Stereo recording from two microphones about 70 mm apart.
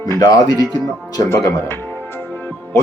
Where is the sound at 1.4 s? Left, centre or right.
Left.